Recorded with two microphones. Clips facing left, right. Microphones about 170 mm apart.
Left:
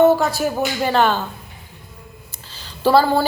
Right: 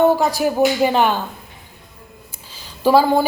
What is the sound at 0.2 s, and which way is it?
A woman's voice, 15° right (ahead or behind).